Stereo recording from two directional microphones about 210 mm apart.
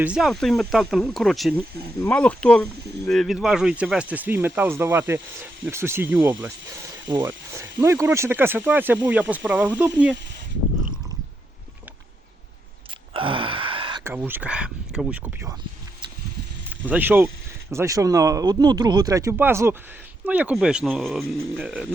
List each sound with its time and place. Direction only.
0.0 s speech: 5° right (ahead or behind)
13.1 s a sound: 25° right (ahead or behind)
14.0 s speech: 10° right (ahead or behind)
16.8 s speech: 10° right (ahead or behind)